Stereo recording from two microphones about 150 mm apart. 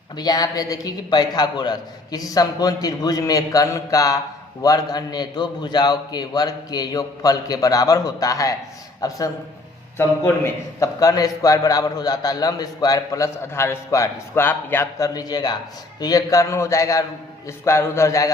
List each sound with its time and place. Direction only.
0.2 s a man's voice: 25° left (ahead or behind)